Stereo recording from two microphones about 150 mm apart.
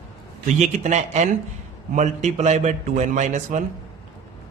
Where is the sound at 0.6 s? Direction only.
50° right (ahead or behind).